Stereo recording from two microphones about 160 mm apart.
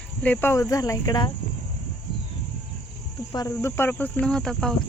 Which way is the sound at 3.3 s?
20° left (ahead or behind).